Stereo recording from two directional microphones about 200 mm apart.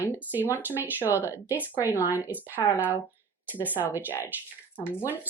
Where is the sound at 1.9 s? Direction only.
15° left (ahead or behind).